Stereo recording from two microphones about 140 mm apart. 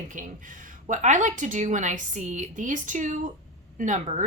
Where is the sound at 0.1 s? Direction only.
65° right (ahead or behind).